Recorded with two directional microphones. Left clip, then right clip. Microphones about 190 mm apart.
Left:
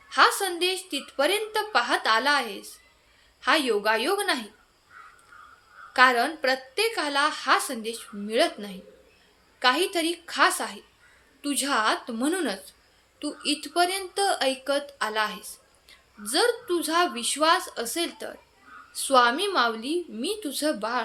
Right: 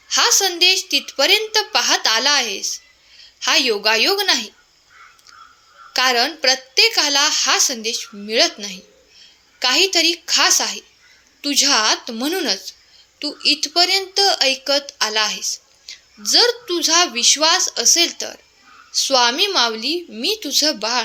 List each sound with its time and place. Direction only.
0.1 s a woman's voice: 25° right (ahead or behind)
5.9 s a woman's voice: 25° right (ahead or behind)